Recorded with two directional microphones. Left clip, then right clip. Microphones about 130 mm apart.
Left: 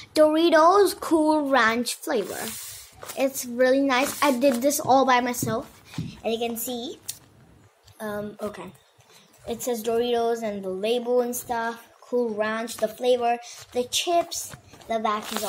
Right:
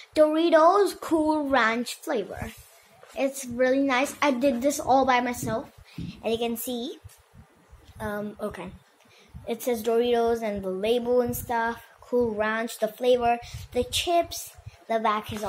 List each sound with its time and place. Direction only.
0.0 s speech: 40° left (ahead or behind)
6.0 s a woman's voice: 20° left (ahead or behind)
8.0 s a woman's voice: 20° left (ahead or behind)